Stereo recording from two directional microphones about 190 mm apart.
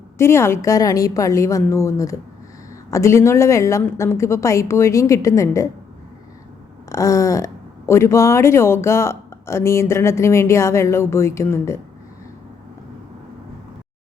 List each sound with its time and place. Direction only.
0.2 s speech: 15° left (ahead or behind)
6.8 s speech: 15° left (ahead or behind)